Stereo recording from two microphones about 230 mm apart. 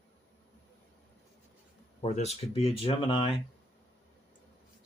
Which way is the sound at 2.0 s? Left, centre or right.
Left.